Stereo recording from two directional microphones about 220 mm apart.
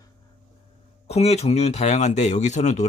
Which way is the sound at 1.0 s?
30° left (ahead or behind).